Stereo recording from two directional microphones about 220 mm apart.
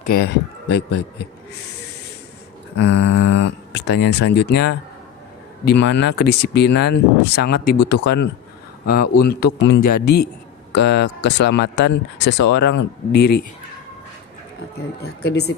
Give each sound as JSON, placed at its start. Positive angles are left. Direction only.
{"t": 0.0, "sound": "speech", "side_deg": 40}
{"t": 2.7, "sound": "speech", "side_deg": 50}
{"t": 15.0, "sound": "speech", "side_deg": 50}